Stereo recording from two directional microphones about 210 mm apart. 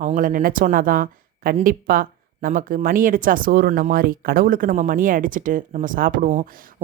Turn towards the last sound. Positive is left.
turn(degrees=-35)  # may be behind; listen again after turning